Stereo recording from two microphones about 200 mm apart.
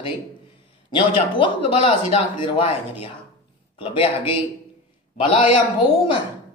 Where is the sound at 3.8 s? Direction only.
30° left (ahead or behind).